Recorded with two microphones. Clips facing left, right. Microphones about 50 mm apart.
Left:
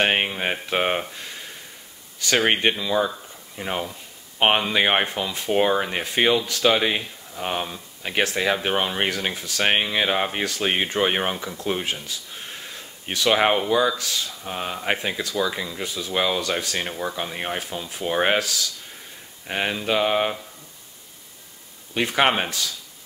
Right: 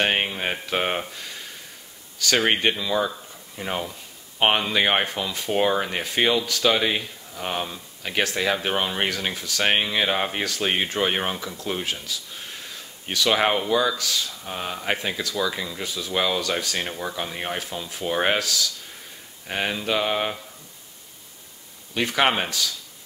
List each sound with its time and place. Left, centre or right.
0.0 s speech: centre
6.4 s speech: centre
6.7 s speech: centre
11.6 s a sound: centre
13.3 s speech: centre
13.9 s speech: left
14.4 s speech: centre
21.9 s speech: centre